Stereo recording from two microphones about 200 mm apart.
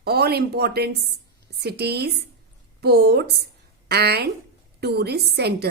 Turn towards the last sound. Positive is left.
turn(degrees=-55)  # may be behind; listen again after turning